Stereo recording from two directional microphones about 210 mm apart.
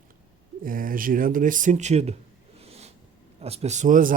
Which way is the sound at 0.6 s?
40° right (ahead or behind).